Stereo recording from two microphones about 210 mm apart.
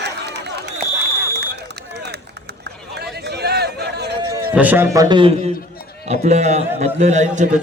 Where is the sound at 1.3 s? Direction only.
50° right (ahead or behind).